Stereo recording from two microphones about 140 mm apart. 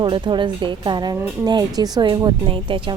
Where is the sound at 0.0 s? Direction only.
35° right (ahead or behind).